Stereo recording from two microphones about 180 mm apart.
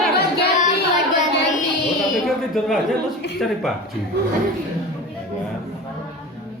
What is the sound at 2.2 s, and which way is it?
A woman's voice, centre (ahead or behind).